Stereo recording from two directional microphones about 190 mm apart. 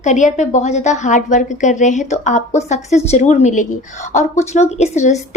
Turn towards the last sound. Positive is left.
turn(degrees=35)  # may be behind; listen again after turning